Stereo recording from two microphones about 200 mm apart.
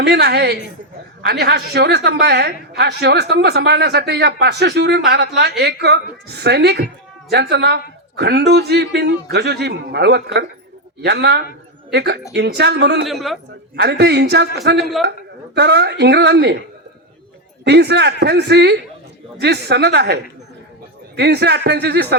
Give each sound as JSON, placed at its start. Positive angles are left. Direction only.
{"t": 0.0, "sound": "a woman's voice", "side_deg": -55}
{"t": 13.1, "sound": "a man's voice", "side_deg": 0}
{"t": 13.7, "sound": "a woman's voice", "side_deg": -55}
{"t": 17.7, "sound": "a woman's voice", "side_deg": -55}
{"t": 21.2, "sound": "a woman's voice", "side_deg": -55}